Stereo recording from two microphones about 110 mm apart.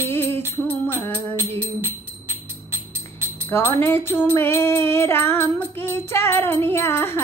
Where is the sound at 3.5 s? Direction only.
20° left (ahead or behind).